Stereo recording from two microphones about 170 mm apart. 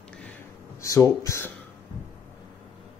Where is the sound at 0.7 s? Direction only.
20° left (ahead or behind).